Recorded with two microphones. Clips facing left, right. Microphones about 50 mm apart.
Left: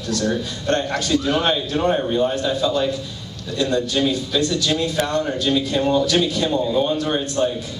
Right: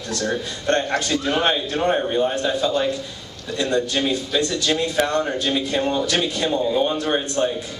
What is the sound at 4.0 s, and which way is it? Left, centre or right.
A man's voice, centre.